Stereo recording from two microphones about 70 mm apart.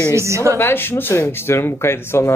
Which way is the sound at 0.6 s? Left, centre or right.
Left.